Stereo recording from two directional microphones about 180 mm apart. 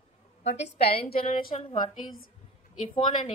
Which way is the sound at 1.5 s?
25° left (ahead or behind).